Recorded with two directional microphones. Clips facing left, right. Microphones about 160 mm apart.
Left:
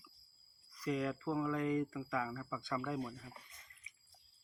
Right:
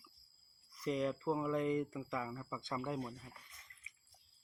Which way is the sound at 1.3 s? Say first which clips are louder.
Left 1 dB; 20° right (ahead or behind).